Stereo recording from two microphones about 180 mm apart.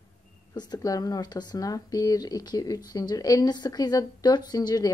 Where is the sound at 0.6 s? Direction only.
20° left (ahead or behind).